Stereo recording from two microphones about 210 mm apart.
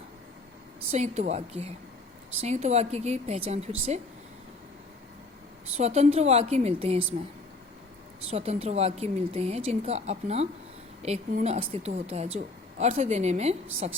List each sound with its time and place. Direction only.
0.9 s a woman's voice: 30° right (ahead or behind)
5.7 s a woman's voice: 30° right (ahead or behind)
8.3 s a woman's voice: 30° right (ahead or behind)